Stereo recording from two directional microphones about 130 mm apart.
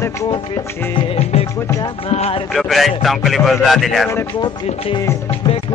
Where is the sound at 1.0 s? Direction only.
50° left (ahead or behind).